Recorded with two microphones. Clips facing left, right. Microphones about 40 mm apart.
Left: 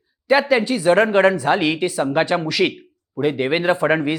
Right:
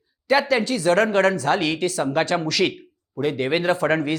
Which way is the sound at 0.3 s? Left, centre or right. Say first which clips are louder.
Left 3 dB; centre.